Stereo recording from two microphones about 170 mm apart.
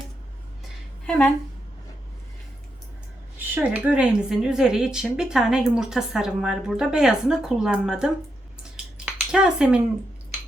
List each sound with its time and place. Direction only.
1.0 s a woman's voice: 5° left (ahead or behind)
3.3 s speech: 10° right (ahead or behind)
8.7 s a sound: 5° right (ahead or behind)